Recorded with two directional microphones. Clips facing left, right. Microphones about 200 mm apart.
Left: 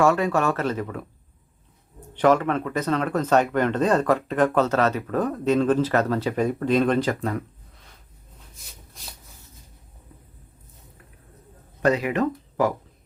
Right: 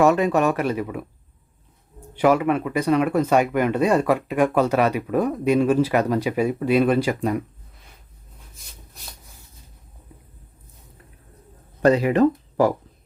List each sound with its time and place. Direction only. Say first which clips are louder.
0.0 s speech: right 3 dB; 20° right (ahead or behind)
2.1 s speech: right 1 dB; 10° right (ahead or behind)
11.8 s speech: right 5 dB; 30° right (ahead or behind)